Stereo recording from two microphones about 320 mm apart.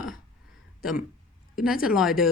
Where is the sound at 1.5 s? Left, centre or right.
Centre.